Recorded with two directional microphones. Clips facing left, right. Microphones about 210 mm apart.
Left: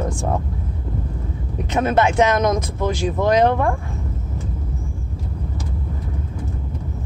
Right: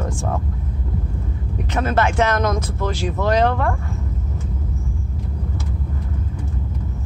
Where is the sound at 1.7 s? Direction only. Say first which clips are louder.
Left 3 dB; 20° left (ahead or behind).